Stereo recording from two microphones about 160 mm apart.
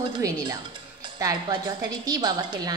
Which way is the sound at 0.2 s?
20° right (ahead or behind).